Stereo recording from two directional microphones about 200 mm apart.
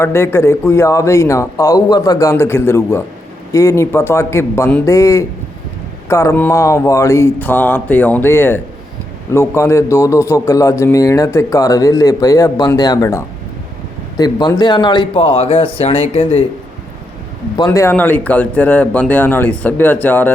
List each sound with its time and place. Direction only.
0.0 s a man's voice: 15° left (ahead or behind)
17.6 s a man's voice: 15° left (ahead or behind)